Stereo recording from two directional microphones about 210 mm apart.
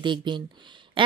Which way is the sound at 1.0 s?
25° right (ahead or behind).